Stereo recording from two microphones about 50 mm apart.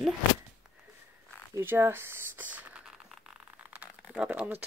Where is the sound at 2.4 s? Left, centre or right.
Right.